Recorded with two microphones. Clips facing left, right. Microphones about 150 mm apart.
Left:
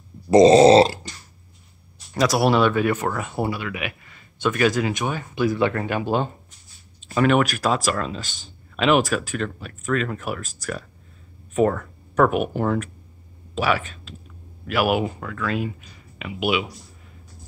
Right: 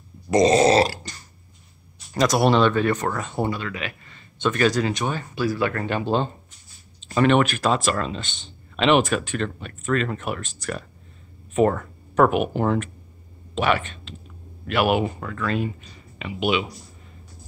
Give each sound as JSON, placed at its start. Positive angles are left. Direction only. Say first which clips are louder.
{"t": 0.3, "sound": "grunt", "louder": "left 5 dB", "side_deg": 25}
{"t": 2.1, "sound": "speech", "louder": "even", "side_deg": 0}